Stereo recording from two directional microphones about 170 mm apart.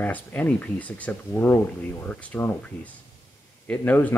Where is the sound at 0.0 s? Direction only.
10° left (ahead or behind).